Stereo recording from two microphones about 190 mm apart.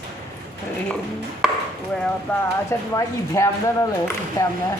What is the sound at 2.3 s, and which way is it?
Speech, 10° left (ahead or behind).